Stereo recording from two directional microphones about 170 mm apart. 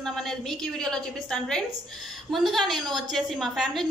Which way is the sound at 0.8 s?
5° left (ahead or behind).